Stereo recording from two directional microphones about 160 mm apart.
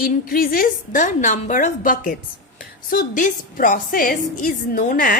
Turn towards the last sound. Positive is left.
turn(degrees=60)  # may be behind; listen again after turning